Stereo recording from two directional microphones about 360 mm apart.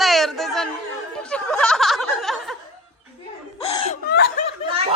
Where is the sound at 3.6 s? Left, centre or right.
Centre.